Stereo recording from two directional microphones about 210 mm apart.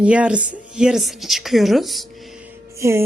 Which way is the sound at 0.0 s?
5° right (ahead or behind).